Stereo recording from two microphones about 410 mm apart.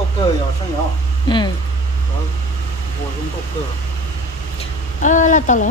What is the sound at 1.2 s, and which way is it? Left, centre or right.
Speech, centre.